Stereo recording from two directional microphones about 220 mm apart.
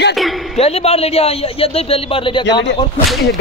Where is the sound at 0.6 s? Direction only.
30° left (ahead or behind).